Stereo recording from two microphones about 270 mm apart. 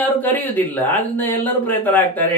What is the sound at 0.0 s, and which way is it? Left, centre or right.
Speech, centre.